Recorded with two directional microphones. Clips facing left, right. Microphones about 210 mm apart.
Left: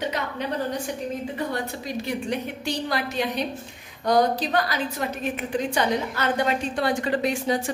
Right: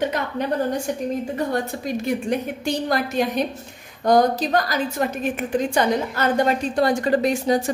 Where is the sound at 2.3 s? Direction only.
50° right (ahead or behind).